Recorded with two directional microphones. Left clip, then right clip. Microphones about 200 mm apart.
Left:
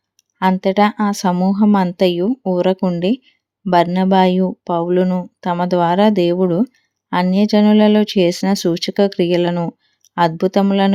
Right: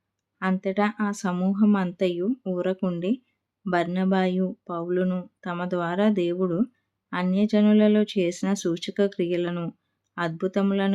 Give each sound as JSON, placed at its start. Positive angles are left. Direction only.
{"t": 0.5, "sound": "speech", "side_deg": 35}